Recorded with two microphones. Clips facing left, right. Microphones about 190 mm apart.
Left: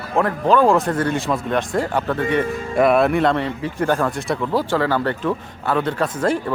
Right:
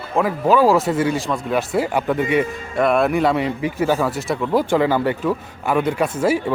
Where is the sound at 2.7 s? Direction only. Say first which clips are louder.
Left 1 dB; 5° left (ahead or behind).